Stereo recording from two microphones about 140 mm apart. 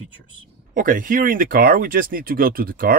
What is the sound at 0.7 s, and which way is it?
Speech, 75° right (ahead or behind).